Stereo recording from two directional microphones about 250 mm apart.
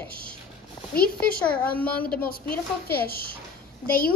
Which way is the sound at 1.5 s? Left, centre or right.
Centre.